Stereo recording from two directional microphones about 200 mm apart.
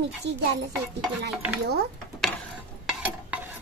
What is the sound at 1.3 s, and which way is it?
Speech, 5° right (ahead or behind).